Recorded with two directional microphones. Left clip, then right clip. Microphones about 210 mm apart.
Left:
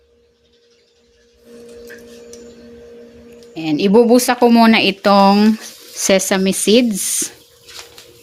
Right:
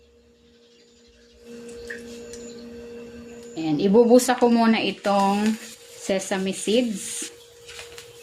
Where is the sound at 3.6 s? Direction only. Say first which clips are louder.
Left 6 dB; 35° left (ahead or behind); by 6.8 s 60° left (ahead or behind).